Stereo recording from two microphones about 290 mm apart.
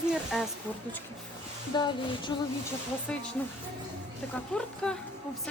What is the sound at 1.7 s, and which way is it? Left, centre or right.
Speech, centre.